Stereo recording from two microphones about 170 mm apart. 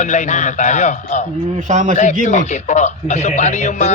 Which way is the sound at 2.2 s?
45° left (ahead or behind).